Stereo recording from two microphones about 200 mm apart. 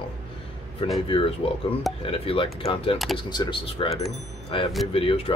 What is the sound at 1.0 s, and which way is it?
Speech, 25° left (ahead or behind).